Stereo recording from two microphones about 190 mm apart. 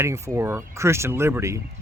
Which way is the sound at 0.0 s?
15° right (ahead or behind).